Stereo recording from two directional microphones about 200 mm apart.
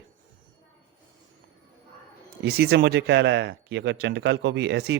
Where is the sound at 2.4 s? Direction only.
55° right (ahead or behind).